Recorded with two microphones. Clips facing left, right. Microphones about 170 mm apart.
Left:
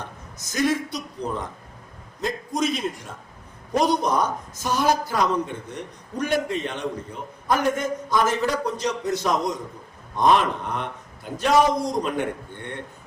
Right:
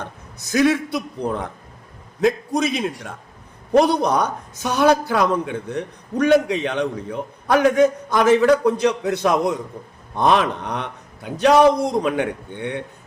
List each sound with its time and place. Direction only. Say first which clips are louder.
0.3 s a man's voice: right 6 dB; 65° right (ahead or behind)